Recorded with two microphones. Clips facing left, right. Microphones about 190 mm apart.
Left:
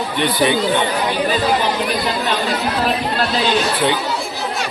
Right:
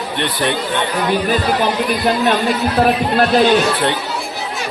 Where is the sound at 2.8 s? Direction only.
50° right (ahead or behind).